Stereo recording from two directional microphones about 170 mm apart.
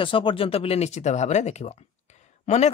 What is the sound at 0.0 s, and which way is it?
Speech, 30° left (ahead or behind).